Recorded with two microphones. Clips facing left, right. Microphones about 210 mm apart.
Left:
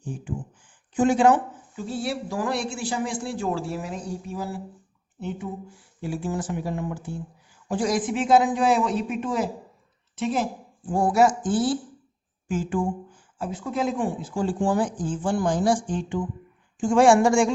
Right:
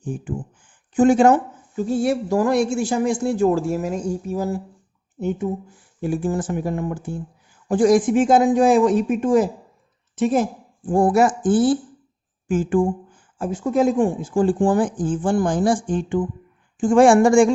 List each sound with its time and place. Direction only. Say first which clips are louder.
0.0 s a woman's voice: right 5 dB; 50° right (ahead or behind)